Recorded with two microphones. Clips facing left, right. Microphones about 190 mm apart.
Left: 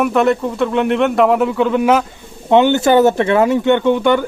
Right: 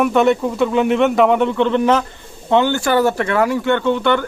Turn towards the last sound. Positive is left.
turn(degrees=15)  # may be behind; listen again after turning